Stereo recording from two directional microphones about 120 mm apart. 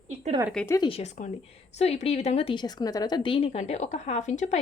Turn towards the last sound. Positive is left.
turn(degrees=75)  # may be behind; listen again after turning